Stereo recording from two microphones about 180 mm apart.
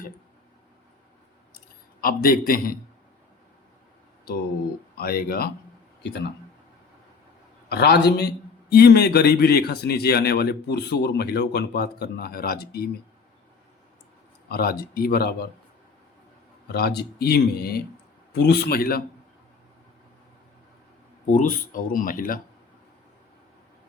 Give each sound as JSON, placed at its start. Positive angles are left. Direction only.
{"t": 2.0, "sound": "speech", "side_deg": 55}
{"t": 4.9, "sound": "speech", "side_deg": 55}
{"t": 7.7, "sound": "speech", "side_deg": 65}
{"t": 14.5, "sound": "speech", "side_deg": 55}
{"t": 16.7, "sound": "speech", "side_deg": 60}
{"t": 21.2, "sound": "speech", "side_deg": 45}